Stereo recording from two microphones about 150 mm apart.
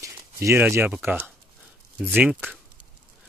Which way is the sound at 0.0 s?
15° right (ahead or behind).